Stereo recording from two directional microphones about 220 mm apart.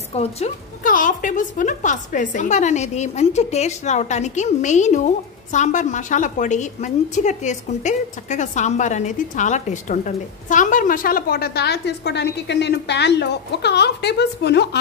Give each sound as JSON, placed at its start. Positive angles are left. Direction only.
{"t": 0.1, "sound": "a woman's voice", "side_deg": 30}